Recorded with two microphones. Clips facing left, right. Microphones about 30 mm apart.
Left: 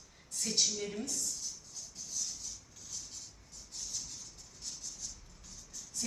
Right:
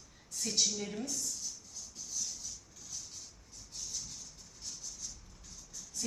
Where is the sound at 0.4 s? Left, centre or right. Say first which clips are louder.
Even; centre.